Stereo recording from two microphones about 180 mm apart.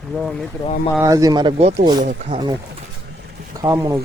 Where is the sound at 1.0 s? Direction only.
20° right (ahead or behind).